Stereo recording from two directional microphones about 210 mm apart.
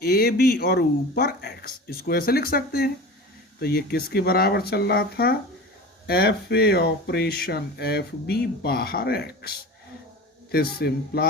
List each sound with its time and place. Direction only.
0.0 s speech: 50° left (ahead or behind)